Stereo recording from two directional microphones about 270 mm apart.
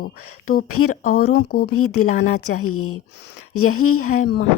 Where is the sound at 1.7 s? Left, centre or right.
Left.